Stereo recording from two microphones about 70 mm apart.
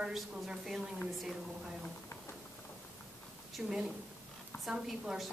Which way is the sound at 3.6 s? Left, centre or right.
Centre.